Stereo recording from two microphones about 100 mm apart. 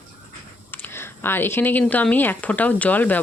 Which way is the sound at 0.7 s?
20° left (ahead or behind).